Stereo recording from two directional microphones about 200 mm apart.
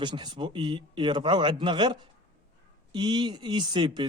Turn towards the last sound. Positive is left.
turn(degrees=-25)  # may be behind; listen again after turning